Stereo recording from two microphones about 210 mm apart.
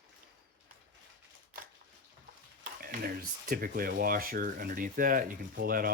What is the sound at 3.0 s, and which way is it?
Speech, 45° right (ahead or behind).